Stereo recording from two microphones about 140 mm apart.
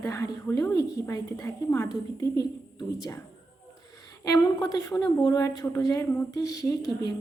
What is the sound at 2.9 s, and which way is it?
A woman's voice, 25° left (ahead or behind).